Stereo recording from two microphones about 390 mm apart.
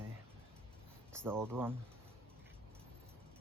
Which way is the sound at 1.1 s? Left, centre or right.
Centre.